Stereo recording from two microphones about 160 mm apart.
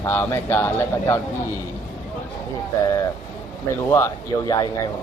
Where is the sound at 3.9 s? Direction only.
20° left (ahead or behind).